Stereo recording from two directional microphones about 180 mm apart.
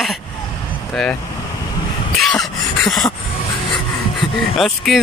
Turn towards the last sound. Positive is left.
turn(degrees=0)  # may be behind; listen again after turning